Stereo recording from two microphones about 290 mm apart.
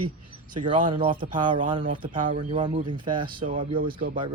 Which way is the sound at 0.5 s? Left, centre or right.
Centre.